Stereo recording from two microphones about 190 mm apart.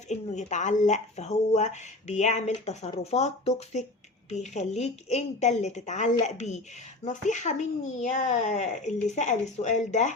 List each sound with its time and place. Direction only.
0.1 s speech: 40° left (ahead or behind)